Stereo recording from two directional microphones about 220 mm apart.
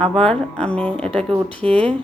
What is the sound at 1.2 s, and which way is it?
Speech, 25° right (ahead or behind).